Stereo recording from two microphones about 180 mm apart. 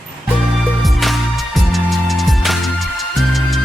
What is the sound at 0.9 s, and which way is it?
Music, centre (ahead or behind).